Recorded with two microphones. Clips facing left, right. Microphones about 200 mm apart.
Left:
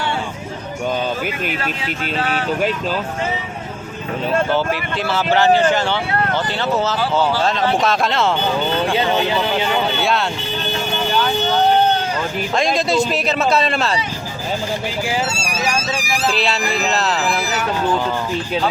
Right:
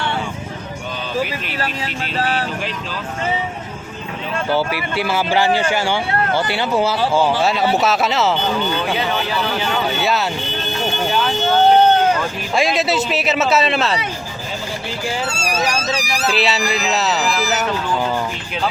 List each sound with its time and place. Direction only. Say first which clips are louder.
2.1 s speech: right 2 dB; 40° right (ahead or behind)
4.5 s speech: even; 10° right (ahead or behind)
9.1 s speech: left 3 dB; 20° left (ahead or behind)
10.0 s a man's voice: even; 5° right (ahead or behind)
12.5 s a man's voice: even; 5° right (ahead or behind)
16.2 s a man's voice: right 1 dB; centre (ahead or behind)